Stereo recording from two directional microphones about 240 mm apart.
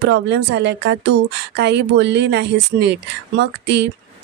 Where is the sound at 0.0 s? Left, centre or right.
Right.